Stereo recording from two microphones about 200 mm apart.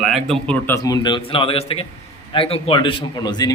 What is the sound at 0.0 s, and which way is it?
Speech, centre (ahead or behind).